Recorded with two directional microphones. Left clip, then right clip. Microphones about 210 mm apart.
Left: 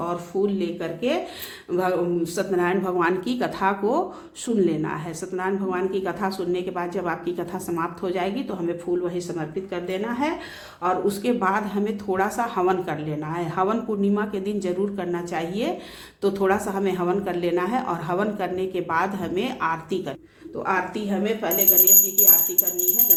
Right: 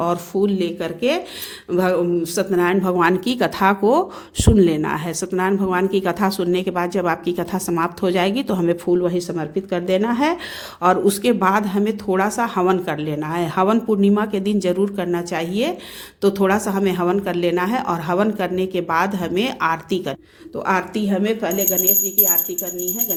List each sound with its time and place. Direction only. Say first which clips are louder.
0.0 s a woman's voice: right 5 dB; 50° right (ahead or behind)
20.7 s a woman's voice: right 4 dB; 50° right (ahead or behind)